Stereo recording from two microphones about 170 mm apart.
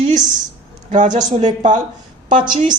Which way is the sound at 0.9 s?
45° right (ahead or behind).